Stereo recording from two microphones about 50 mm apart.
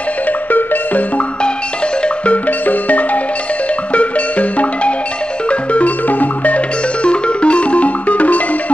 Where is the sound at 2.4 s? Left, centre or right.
Left.